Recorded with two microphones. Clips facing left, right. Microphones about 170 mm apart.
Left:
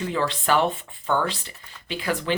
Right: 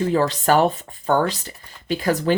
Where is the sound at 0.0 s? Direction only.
40° right (ahead or behind).